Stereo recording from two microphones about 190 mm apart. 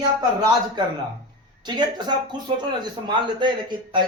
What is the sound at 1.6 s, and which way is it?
Speech, 20° right (ahead or behind).